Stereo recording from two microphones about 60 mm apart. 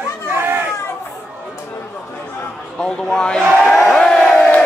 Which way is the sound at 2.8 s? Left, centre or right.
Centre.